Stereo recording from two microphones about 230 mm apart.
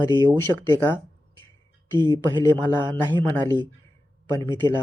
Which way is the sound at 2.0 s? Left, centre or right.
Centre.